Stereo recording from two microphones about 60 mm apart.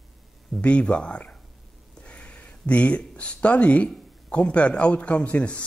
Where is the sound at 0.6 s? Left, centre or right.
Centre.